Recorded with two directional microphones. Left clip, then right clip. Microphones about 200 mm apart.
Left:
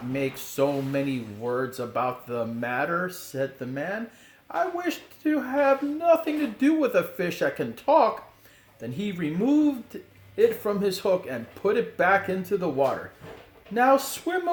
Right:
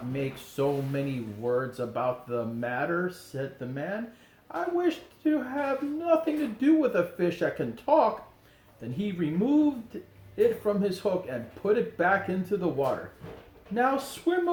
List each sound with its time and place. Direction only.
0.1 s speech: 50° left (ahead or behind)
13.7 s speech: 50° left (ahead or behind)